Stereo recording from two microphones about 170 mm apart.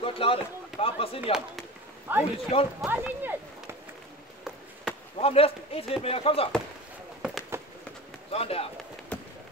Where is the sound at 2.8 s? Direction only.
10° right (ahead or behind).